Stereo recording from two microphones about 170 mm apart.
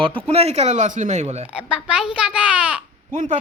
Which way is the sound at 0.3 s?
35° right (ahead or behind).